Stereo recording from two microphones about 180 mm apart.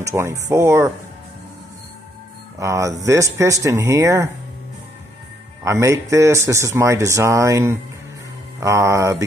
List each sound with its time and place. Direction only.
0.0 s speech: 15° right (ahead or behind)
2.6 s speech: 15° right (ahead or behind)
5.6 s speech: 15° right (ahead or behind)